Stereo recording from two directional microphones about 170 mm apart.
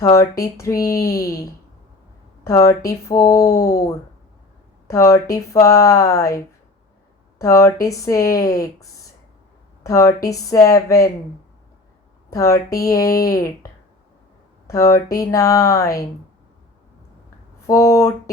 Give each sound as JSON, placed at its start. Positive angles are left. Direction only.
{"t": 0.0, "sound": "speech", "side_deg": 20}
{"t": 12.3, "sound": "speech", "side_deg": 15}
{"t": 14.7, "sound": "speech", "side_deg": 20}
{"t": 17.7, "sound": "speech", "side_deg": 20}